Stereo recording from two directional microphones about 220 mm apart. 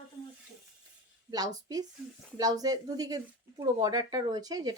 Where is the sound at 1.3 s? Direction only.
15° right (ahead or behind).